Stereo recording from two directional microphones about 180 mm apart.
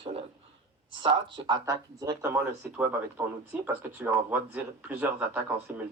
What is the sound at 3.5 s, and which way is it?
Speech, 10° right (ahead or behind).